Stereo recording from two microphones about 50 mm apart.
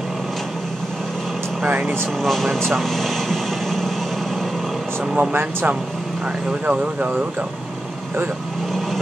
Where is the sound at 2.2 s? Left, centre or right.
Centre.